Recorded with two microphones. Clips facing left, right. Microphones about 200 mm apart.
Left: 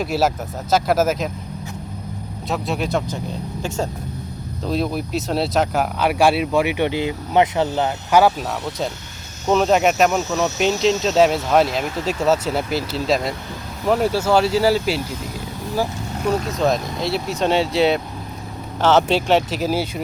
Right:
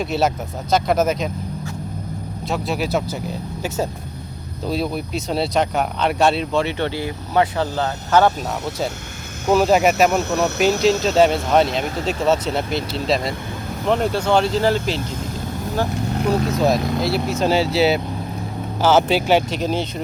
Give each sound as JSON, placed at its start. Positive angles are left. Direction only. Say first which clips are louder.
{"t": 0.0, "sound": "speech", "louder": "even", "side_deg": 0}
{"t": 2.5, "sound": "speech", "louder": "even", "side_deg": 0}
{"t": 4.6, "sound": "speech", "louder": "left 1 dB", "side_deg": 0}
{"t": 9.5, "sound": "speech", "louder": "right 1 dB", "side_deg": -5}
{"t": 10.1, "sound": "cricket", "louder": "right 1 dB", "side_deg": -60}
{"t": 11.0, "sound": "speech", "louder": "even", "side_deg": 0}
{"t": 16.5, "sound": "speech", "louder": "right 2 dB", "side_deg": 0}